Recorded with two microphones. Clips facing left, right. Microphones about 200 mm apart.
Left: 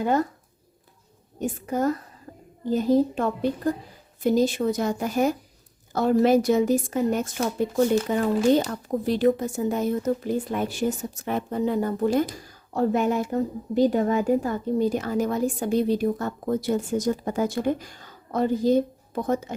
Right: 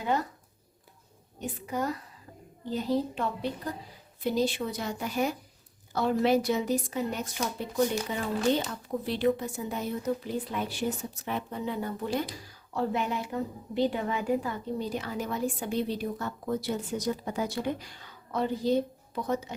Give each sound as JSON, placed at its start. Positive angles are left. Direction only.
{"t": 0.0, "sound": "speech", "side_deg": 45}
{"t": 1.4, "sound": "speech", "side_deg": 45}